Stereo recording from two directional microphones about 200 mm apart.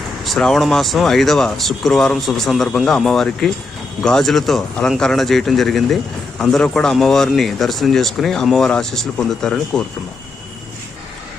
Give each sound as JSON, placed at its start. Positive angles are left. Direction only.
{"t": 0.3, "sound": "speech", "side_deg": 0}